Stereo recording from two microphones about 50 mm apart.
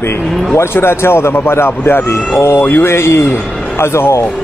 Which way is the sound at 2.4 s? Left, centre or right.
Left.